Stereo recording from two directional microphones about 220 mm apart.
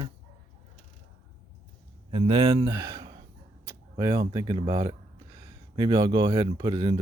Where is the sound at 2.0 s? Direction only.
25° right (ahead or behind).